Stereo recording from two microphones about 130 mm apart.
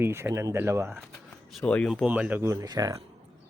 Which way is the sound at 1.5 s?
10° left (ahead or behind).